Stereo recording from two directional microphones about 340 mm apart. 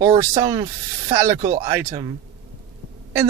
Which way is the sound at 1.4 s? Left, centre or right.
Right.